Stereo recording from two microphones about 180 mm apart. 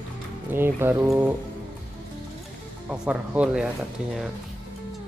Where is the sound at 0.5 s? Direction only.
10° right (ahead or behind).